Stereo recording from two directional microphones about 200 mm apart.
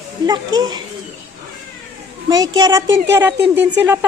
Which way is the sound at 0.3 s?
20° right (ahead or behind).